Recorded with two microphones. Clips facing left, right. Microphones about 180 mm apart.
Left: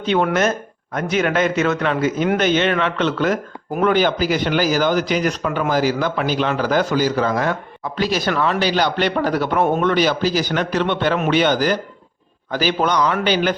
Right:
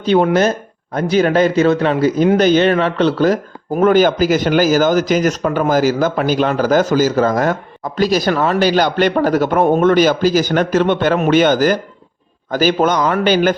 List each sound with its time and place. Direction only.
0.0 s a man's voice: 35° right (ahead or behind)